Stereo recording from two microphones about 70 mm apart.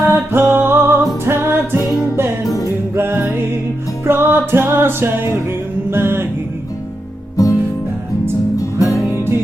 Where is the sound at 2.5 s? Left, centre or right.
Left.